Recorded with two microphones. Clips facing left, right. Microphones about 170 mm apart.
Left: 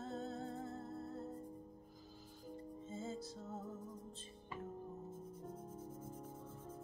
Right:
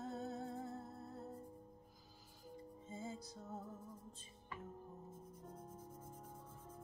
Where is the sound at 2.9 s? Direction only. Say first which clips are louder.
Left 2 dB; 15° right (ahead or behind).